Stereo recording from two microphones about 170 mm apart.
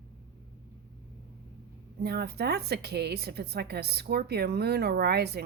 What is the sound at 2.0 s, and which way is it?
A woman's voice, 70° right (ahead or behind).